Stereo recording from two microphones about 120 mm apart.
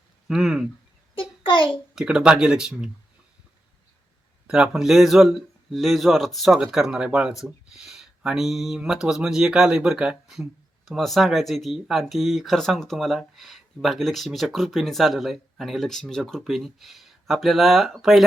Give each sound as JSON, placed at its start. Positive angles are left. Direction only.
{"t": 0.3, "sound": "speech", "side_deg": -5}
{"t": 1.1, "sound": "a sound", "side_deg": 45}
{"t": 2.0, "sound": "speech", "side_deg": -5}
{"t": 4.4, "sound": "speech", "side_deg": -5}